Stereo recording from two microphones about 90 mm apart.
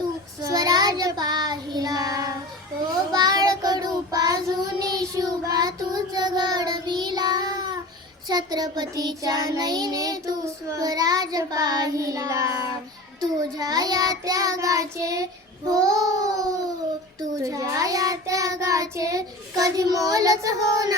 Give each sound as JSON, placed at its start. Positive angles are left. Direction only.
{"t": 0.4, "sound": "child singing", "side_deg": -45}
{"t": 13.6, "sound": "child singing", "side_deg": -45}